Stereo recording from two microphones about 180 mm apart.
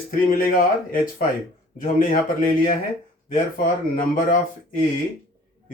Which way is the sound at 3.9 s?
50° left (ahead or behind).